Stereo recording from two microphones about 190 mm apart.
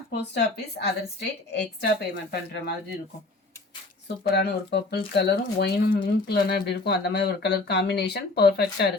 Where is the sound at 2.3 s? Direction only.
60° left (ahead or behind).